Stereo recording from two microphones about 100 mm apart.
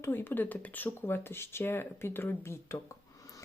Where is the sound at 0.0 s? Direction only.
20° left (ahead or behind).